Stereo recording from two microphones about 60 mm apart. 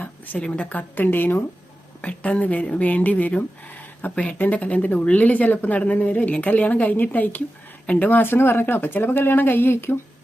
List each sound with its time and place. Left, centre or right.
0.0 s speech: left